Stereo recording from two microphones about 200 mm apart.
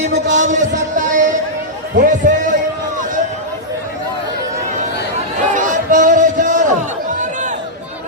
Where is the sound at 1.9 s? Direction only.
40° right (ahead or behind).